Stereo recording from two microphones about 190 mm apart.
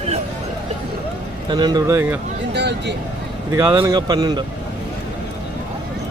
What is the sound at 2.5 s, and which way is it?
Speech, 65° right (ahead or behind).